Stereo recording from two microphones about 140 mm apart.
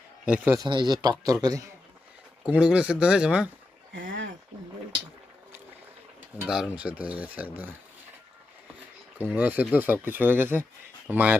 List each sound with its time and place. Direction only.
0.3 s speech: 10° right (ahead or behind)
0.5 s speech: 30° right (ahead or behind)
2.5 s speech: 5° right (ahead or behind)
6.4 s speech: 5° right (ahead or behind)
9.3 s speech: 10° right (ahead or behind)